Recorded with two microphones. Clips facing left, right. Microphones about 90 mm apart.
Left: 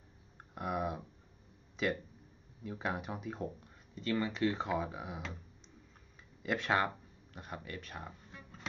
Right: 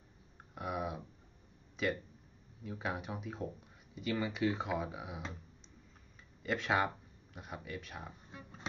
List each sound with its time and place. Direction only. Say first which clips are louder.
0.6 s a sound: left 2 dB; centre (ahead or behind)
1.8 s speech: left 1 dB; centre (ahead or behind)
6.4 s speech: left 1 dB; centre (ahead or behind)
8.3 s music: right 1 dB; 20° right (ahead or behind)